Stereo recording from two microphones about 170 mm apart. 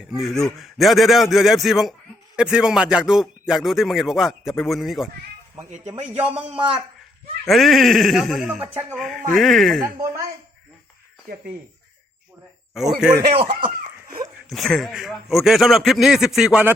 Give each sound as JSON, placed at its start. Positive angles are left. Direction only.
{"t": 0.1, "sound": "a man's voice", "side_deg": 0}
{"t": 5.9, "sound": "a man's voice", "side_deg": -35}
{"t": 7.4, "sound": "a man's voice", "side_deg": 0}
{"t": 12.7, "sound": "a man's voice", "side_deg": 0}
{"t": 13.3, "sound": "a man's voice", "side_deg": -30}
{"t": 14.5, "sound": "a man's voice", "side_deg": 0}